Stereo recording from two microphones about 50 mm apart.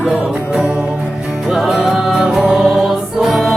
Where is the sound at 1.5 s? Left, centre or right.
Centre.